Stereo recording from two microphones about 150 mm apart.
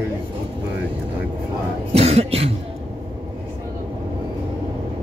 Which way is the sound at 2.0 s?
45° right (ahead or behind).